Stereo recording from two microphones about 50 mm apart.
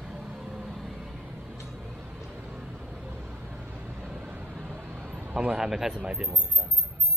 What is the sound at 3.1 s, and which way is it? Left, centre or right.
Vehicle, right.